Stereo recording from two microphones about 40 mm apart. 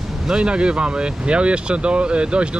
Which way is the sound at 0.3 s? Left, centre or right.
Right.